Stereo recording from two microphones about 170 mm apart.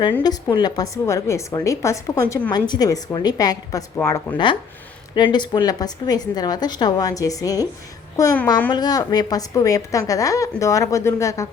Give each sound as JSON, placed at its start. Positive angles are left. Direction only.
{"t": 0.5, "sound": "a woman's voice", "side_deg": 20}